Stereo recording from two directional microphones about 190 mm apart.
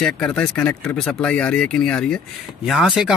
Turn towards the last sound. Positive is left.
turn(degrees=0)  # may be behind; listen again after turning